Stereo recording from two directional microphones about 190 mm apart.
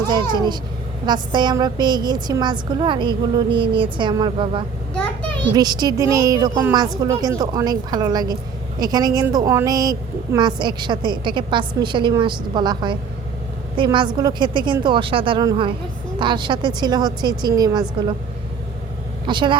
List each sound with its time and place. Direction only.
0.1 s a woman's voice: 25° right (ahead or behind)
4.9 s a sound: 10° left (ahead or behind)
5.5 s a woman's voice: 20° right (ahead or behind)
19.2 s a woman's voice: 25° right (ahead or behind)